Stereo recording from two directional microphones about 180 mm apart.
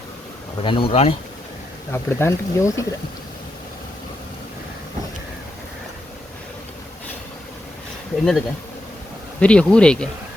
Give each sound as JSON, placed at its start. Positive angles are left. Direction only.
{"t": 0.6, "sound": "speech", "side_deg": 30}
{"t": 1.9, "sound": "speech", "side_deg": 15}
{"t": 8.2, "sound": "speech", "side_deg": 0}